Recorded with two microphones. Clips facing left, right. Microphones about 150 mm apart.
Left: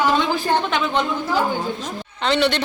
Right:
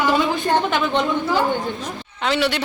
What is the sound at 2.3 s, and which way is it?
Speech, 5° right (ahead or behind).